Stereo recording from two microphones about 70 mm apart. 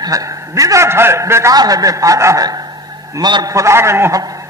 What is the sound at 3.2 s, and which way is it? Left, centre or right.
Speech, right.